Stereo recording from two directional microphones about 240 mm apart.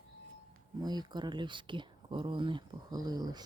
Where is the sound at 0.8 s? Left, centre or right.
Centre.